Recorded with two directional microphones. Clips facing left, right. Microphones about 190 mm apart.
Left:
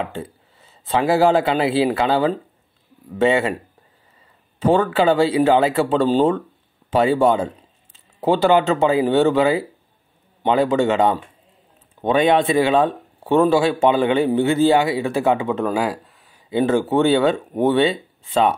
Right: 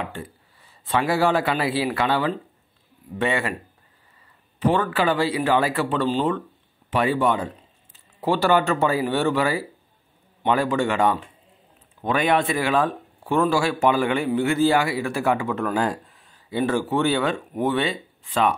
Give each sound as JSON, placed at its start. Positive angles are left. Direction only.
{"t": 0.0, "sound": "speech", "side_deg": 25}
{"t": 4.6, "sound": "speech", "side_deg": 25}
{"t": 15.7, "sound": "speech", "side_deg": 5}
{"t": 16.4, "sound": "speech", "side_deg": 25}